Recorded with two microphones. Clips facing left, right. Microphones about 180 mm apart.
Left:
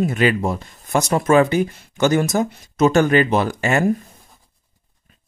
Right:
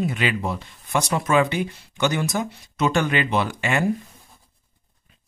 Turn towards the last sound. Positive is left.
turn(degrees=45)  # may be behind; listen again after turning